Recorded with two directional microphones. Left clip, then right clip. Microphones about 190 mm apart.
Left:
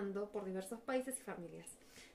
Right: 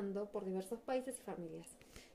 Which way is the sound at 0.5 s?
30° right (ahead or behind).